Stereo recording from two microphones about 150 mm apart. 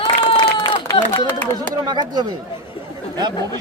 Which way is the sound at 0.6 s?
30° left (ahead or behind).